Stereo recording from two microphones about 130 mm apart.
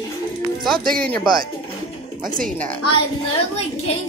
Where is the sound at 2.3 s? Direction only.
90° right.